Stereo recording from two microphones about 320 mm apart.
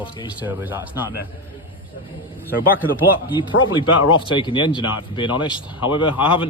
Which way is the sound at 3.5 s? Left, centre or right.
Left.